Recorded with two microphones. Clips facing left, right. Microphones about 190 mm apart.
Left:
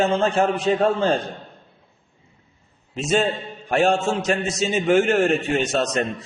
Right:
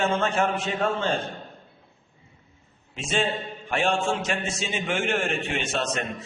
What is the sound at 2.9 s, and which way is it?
A man's voice, 40° left (ahead or behind).